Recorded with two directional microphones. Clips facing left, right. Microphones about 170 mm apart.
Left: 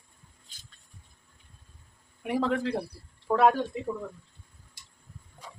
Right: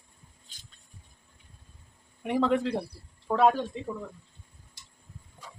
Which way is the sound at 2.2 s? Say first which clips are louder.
Right 2 dB; 5° left (ahead or behind).